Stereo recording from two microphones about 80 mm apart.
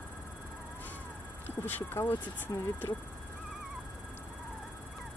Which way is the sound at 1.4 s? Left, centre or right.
Left.